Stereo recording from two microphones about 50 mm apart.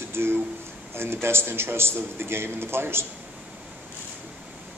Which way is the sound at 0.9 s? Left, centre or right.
Right.